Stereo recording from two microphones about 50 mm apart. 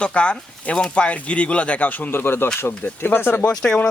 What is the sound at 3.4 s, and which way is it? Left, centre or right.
Speech, centre.